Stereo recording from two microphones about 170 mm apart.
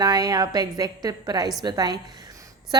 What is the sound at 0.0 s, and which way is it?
A woman's voice, 20° right (ahead or behind).